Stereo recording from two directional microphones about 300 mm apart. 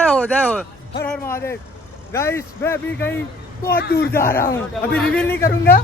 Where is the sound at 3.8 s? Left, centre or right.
Left.